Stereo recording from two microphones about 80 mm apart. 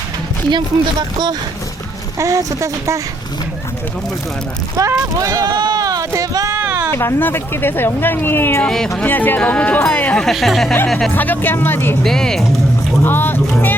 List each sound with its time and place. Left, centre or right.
0.5 s speech: right
2.1 s speech: right
4.8 s speech: right
6.9 s speech: left
8.6 s speech: centre
9.0 s speech: left
10.2 s speech: centre
11.1 s speech: left
12.0 s speech: centre
13.1 s speech: left